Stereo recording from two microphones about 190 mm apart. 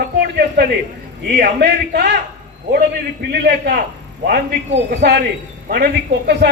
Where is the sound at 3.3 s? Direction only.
55° right (ahead or behind).